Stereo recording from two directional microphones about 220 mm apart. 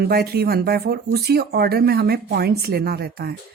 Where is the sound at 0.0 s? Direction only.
45° right (ahead or behind).